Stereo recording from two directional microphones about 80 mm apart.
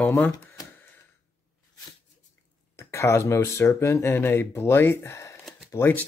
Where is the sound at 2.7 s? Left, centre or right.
Left.